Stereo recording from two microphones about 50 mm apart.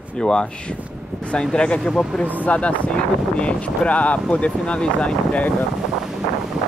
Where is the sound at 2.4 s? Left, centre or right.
Left.